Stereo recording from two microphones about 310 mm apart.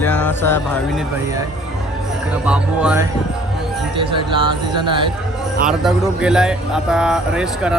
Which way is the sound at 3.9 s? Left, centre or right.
Centre.